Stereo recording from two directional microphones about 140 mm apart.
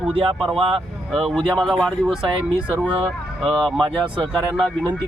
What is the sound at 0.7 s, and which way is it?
Speech, centre (ahead or behind).